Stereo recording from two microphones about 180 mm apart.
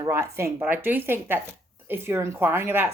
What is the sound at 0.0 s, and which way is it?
Speech, 15° right (ahead or behind).